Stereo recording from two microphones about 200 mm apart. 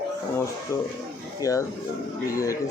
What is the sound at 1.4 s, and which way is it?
Speech, 15° left (ahead or behind).